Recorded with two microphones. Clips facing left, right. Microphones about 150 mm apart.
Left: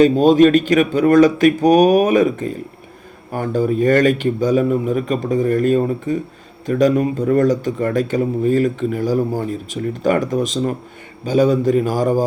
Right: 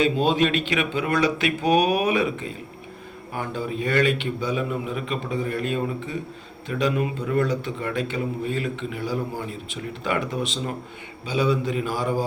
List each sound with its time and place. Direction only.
0.0 s speech: 45° left (ahead or behind)